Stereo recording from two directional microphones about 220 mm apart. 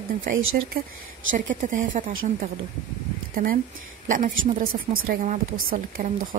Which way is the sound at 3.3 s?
40° right (ahead or behind).